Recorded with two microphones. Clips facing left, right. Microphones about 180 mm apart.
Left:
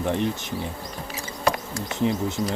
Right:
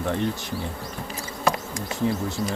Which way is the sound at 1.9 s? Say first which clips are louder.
Left 1 dB; 20° left (ahead or behind).